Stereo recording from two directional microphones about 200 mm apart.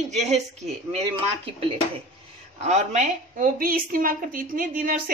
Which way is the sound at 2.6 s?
35° right (ahead or behind).